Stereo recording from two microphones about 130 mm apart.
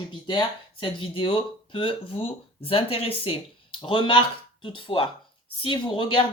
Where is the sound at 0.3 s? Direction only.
35° left (ahead or behind).